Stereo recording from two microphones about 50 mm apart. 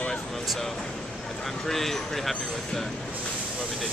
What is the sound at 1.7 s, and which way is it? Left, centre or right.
Speech, centre.